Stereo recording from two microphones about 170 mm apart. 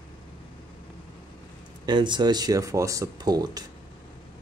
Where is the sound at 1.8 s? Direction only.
25° right (ahead or behind).